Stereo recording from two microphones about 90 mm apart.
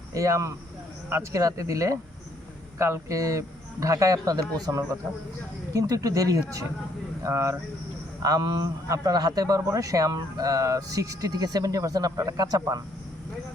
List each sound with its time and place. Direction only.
0.1 s speech: 35° right (ahead or behind)
8.2 s a man's voice: 45° right (ahead or behind)